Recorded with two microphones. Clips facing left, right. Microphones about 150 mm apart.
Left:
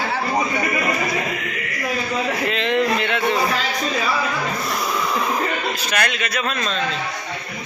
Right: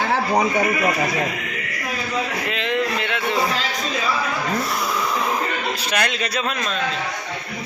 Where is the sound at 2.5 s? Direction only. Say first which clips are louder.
Left 4 dB; 10° right (ahead or behind).